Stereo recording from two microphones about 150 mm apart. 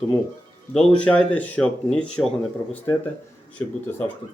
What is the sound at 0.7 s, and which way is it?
Speech, 5° left (ahead or behind).